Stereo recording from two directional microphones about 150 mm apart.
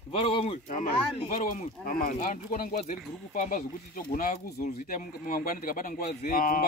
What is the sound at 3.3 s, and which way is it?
Speech, 60° left (ahead or behind).